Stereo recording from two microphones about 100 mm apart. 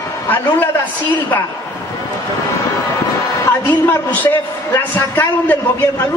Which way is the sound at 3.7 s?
20° left (ahead or behind).